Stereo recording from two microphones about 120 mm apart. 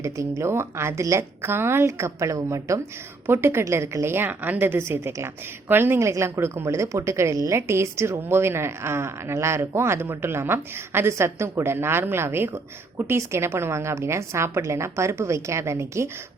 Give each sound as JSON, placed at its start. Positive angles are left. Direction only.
{"t": 0.0, "sound": "a woman's voice", "side_deg": -25}